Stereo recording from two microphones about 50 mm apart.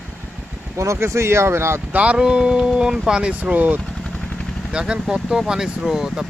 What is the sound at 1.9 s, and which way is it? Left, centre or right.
Speech, right.